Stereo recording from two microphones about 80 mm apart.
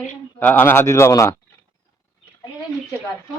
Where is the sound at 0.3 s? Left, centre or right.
Left.